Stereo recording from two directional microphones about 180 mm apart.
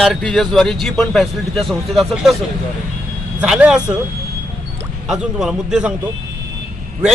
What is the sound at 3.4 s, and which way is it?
Speech, 5° right (ahead or behind).